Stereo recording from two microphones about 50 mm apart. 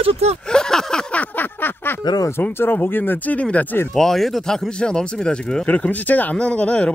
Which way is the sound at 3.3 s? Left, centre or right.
Left.